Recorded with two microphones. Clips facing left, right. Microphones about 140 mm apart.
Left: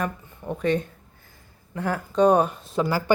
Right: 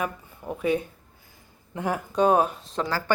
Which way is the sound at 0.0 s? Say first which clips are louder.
Left 1 dB; 5° right (ahead or behind).